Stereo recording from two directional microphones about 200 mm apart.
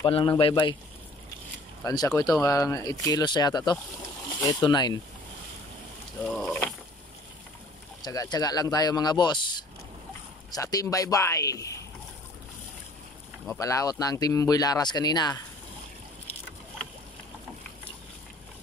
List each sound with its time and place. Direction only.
0.0 s speech: 25° left (ahead or behind)
1.9 s speech: 15° left (ahead or behind)
6.2 s speech: 5° left (ahead or behind)
8.0 s speech: 20° left (ahead or behind)
13.6 s speech: 15° left (ahead or behind)